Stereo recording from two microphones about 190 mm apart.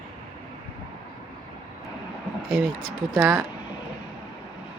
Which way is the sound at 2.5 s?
15° right (ahead or behind).